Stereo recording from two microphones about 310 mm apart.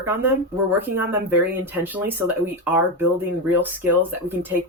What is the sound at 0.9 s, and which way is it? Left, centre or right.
Speech, right.